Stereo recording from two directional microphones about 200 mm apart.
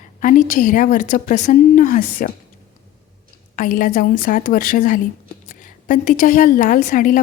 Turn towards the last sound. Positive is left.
turn(degrees=40)  # may be behind; listen again after turning